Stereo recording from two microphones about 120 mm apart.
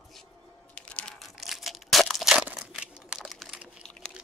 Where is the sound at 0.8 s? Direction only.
10° left (ahead or behind); by 3.2 s 10° right (ahead or behind).